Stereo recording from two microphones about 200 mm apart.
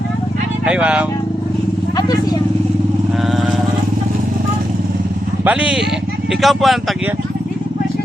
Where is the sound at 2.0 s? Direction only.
20° left (ahead or behind).